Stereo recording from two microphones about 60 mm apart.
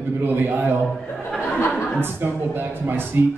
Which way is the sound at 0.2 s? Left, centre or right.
Right.